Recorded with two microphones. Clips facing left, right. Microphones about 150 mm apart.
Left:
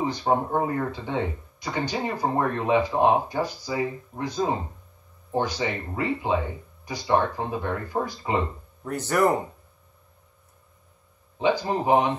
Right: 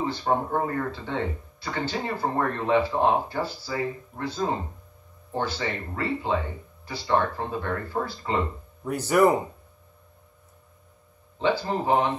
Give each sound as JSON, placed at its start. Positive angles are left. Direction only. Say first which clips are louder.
{"t": 0.0, "sound": "speech", "louder": "left 2 dB", "side_deg": 15}
{"t": 8.8, "sound": "speech", "louder": "right 2 dB", "side_deg": -10}
{"t": 11.3, "sound": "speech", "louder": "left 1 dB", "side_deg": 15}